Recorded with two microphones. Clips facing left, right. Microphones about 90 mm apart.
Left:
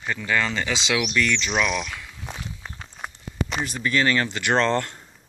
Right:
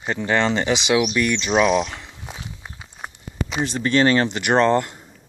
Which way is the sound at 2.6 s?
15° right (ahead or behind).